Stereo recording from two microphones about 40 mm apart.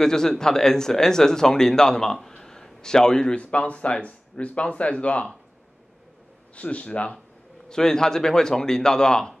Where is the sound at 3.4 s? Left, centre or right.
Left.